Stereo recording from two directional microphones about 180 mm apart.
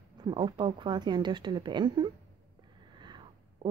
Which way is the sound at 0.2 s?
25° right (ahead or behind).